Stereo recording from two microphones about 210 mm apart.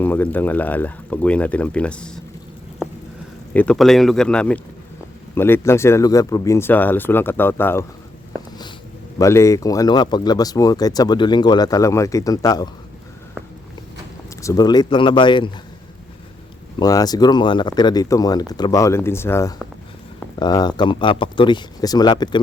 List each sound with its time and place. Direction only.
0.0 s speech: 10° left (ahead or behind)
3.5 s speech: 5° left (ahead or behind)
9.1 s speech: 15° left (ahead or behind)
14.3 s speech: 15° left (ahead or behind)
16.8 s speech: 15° left (ahead or behind)